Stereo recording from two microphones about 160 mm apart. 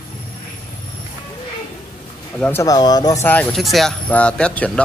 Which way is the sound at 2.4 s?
15° left (ahead or behind).